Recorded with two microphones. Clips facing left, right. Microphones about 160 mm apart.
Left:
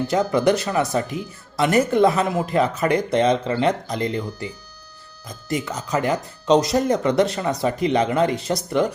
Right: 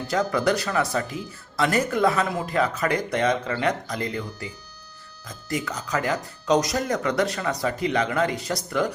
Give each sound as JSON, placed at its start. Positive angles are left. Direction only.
{"t": 0.1, "sound": "speech", "side_deg": 20}
{"t": 5.5, "sound": "speech", "side_deg": 20}